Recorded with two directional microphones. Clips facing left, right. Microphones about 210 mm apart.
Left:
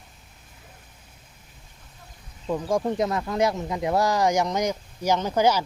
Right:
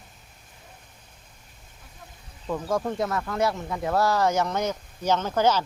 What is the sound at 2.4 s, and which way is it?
Speech, 15° left (ahead or behind).